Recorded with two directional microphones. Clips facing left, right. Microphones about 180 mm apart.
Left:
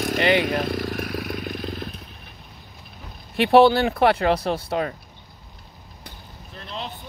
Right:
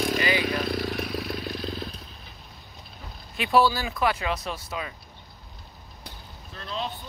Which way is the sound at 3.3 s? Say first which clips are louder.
Left 7 dB; 65° left (ahead or behind).